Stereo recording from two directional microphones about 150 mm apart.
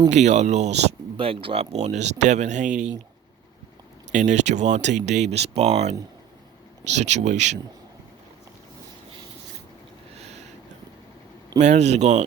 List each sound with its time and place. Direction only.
0.1 s speech: 50° right (ahead or behind)
4.1 s speech: 55° right (ahead or behind)
10.2 s a sound: 45° right (ahead or behind)
11.6 s speech: 50° right (ahead or behind)